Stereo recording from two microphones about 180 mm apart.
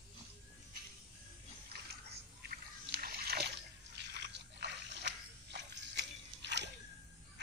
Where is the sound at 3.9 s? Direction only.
75° right (ahead or behind).